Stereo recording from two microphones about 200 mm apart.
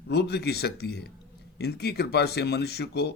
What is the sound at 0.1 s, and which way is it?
Speech, 55° left (ahead or behind).